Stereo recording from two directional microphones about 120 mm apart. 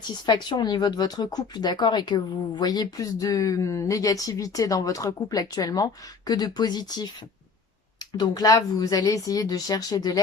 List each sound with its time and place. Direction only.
0.3 s speech: 40° left (ahead or behind)
8.2 s speech: 35° left (ahead or behind)